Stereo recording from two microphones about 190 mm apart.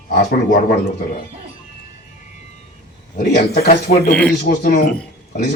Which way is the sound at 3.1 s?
55° left (ahead or behind).